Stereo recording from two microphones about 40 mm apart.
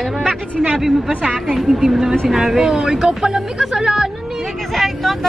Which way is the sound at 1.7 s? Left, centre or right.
Centre.